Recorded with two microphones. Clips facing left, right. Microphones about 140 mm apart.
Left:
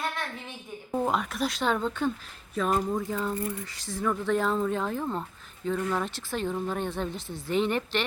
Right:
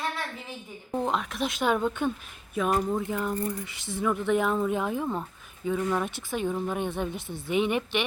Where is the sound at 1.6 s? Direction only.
10° right (ahead or behind).